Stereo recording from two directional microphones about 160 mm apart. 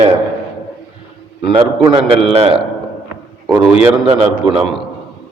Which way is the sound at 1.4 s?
35° right (ahead or behind).